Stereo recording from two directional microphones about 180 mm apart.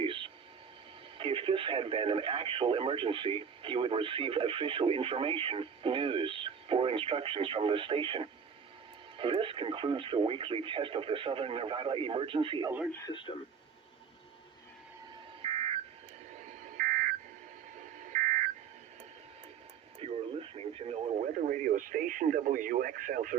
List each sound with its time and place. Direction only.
0.0 s a sound: 30° right (ahead or behind)
1.2 s speech: 30° right (ahead or behind)
12.9 s speech: 15° left (ahead or behind)
15.4 s telephone dialing: 35° right (ahead or behind)
16.7 s telephone dialing: 50° right (ahead or behind)
18.1 s telephone dialing: 45° right (ahead or behind)
20.0 s radio: 35° right (ahead or behind)
21.4 s speech: 50° right (ahead or behind)